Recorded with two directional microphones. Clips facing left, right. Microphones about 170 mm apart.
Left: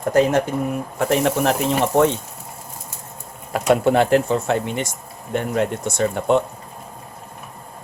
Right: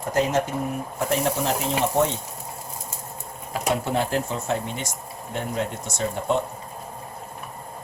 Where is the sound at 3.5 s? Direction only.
65° left (ahead or behind).